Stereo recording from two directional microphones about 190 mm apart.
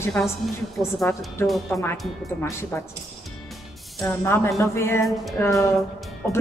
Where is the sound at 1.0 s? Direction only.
Centre (ahead or behind).